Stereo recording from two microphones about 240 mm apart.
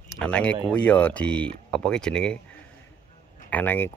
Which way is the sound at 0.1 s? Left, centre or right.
Centre.